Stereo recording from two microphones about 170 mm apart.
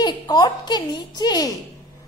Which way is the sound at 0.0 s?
25° left (ahead or behind).